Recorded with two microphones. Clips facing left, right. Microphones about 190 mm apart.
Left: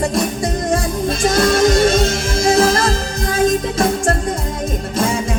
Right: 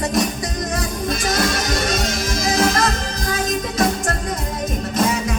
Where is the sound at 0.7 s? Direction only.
30° left (ahead or behind).